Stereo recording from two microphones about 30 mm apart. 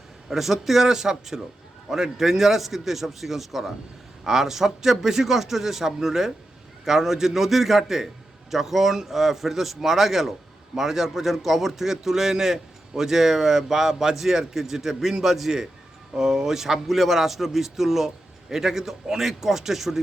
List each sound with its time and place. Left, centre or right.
0.3 s a man's voice: centre
0.9 s a man's voice: centre
15.4 s a man's voice: centre